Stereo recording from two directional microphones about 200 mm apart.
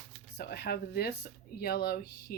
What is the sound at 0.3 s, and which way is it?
Speech, 55° left (ahead or behind).